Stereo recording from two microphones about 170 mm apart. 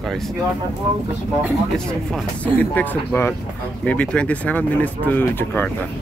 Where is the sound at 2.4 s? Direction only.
10° left (ahead or behind).